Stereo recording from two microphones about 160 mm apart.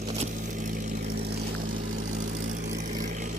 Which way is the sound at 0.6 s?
55° right (ahead or behind).